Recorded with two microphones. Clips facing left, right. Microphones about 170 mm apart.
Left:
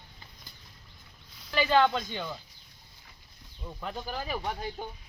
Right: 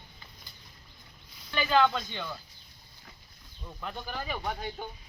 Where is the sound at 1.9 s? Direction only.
10° left (ahead or behind).